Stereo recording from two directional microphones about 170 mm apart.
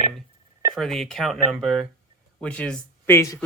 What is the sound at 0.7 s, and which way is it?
Speech, centre (ahead or behind).